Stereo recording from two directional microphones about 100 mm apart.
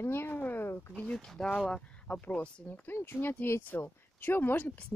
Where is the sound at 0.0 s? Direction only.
20° left (ahead or behind).